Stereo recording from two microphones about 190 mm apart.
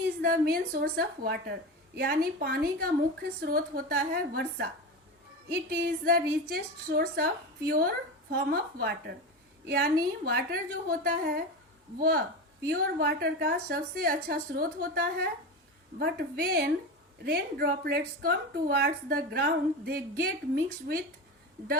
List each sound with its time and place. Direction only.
0.2 s a woman's voice: 50° right (ahead or behind)